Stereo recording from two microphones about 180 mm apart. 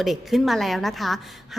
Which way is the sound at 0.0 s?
Centre (ahead or behind).